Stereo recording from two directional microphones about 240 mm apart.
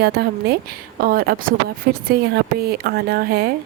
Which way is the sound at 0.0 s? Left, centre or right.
Right.